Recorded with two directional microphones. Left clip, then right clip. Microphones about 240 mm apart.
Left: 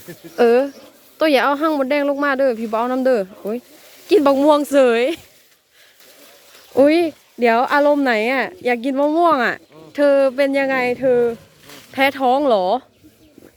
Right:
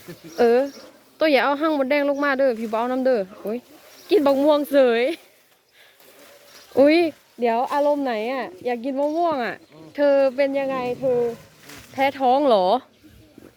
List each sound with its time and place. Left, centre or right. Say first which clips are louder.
0.3 s speech: left 4 dB; centre
6.7 s speech: left 2 dB; centre
7.3 s a woman's voice: left 6 dB; left; by 12.8 s centre